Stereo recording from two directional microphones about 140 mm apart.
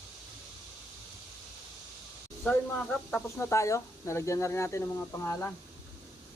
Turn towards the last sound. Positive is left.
turn(degrees=15)  # may be behind; listen again after turning